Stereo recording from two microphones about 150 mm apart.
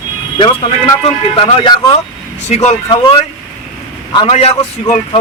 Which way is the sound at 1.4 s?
35° left (ahead or behind).